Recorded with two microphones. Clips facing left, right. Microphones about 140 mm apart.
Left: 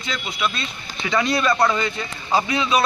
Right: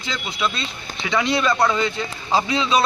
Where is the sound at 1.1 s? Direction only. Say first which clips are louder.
Even; centre (ahead or behind).